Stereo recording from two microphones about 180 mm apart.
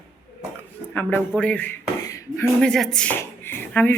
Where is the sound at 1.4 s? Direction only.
10° left (ahead or behind).